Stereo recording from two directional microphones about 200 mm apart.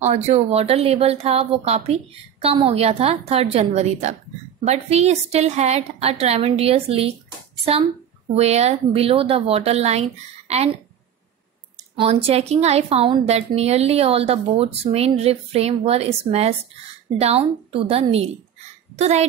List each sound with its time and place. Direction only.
0.0 s a woman's voice: 35° right (ahead or behind)
8.4 s a woman's voice: 30° right (ahead or behind)
11.7 s a woman's voice: 30° right (ahead or behind)